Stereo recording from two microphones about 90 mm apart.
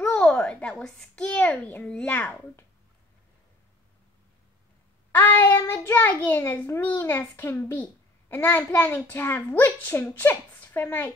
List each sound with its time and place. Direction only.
0.0 s a child's voice: 10° left (ahead or behind)
5.1 s a child's voice: 20° left (ahead or behind)